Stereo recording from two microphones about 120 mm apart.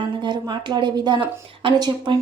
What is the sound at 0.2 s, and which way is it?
Speech, 35° right (ahead or behind).